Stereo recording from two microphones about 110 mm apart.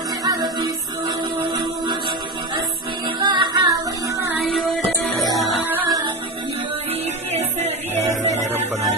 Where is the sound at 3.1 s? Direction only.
40° right (ahead or behind).